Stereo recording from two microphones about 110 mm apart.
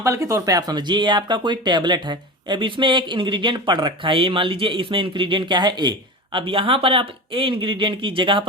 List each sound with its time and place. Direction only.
0.0 s speech: 30° right (ahead or behind)
6.3 s speech: 55° right (ahead or behind)